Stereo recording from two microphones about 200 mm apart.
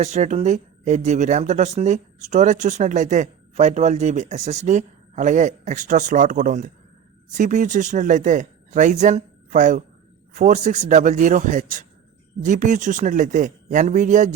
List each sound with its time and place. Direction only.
0.0 s speech: 35° right (ahead or behind)